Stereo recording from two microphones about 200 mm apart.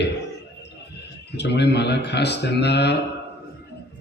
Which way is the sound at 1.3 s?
55° left (ahead or behind).